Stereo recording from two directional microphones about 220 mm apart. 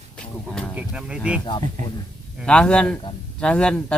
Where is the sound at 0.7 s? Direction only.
5° right (ahead or behind).